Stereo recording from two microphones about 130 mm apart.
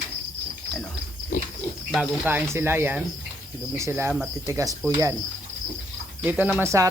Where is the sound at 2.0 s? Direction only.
15° right (ahead or behind).